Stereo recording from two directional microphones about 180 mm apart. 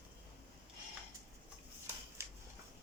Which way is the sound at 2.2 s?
15° right (ahead or behind).